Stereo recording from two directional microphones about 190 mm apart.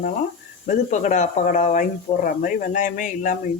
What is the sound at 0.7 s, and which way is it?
Speech, 40° left (ahead or behind).